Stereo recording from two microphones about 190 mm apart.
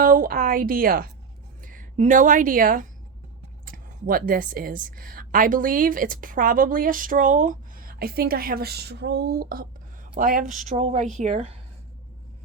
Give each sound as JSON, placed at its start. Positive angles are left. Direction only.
{"t": 0.0, "sound": "a woman's voice", "side_deg": -45}